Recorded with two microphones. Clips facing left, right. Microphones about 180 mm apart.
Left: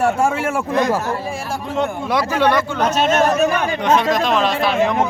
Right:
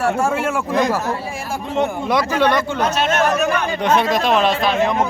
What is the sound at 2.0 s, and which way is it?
Speech, 10° left (ahead or behind).